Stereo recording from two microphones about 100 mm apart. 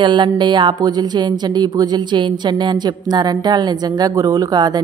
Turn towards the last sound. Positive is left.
turn(degrees=-40)  # may be behind; listen again after turning